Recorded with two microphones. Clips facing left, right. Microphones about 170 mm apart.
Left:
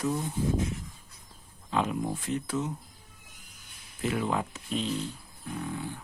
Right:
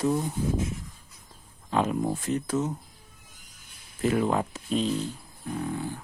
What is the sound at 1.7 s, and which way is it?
Speech, 45° right (ahead or behind).